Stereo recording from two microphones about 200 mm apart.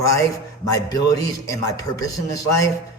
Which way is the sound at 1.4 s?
15° left (ahead or behind).